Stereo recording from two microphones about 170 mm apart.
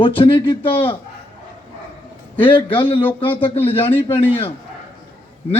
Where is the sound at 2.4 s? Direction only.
30° left (ahead or behind).